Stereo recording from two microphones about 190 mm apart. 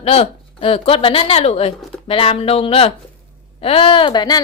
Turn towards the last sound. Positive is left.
turn(degrees=20)  # may be behind; listen again after turning